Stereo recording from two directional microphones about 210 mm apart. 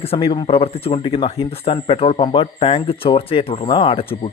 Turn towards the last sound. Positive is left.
turn(degrees=25)  # may be behind; listen again after turning